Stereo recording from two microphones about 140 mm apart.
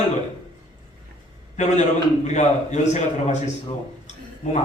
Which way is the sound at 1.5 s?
55° left (ahead or behind).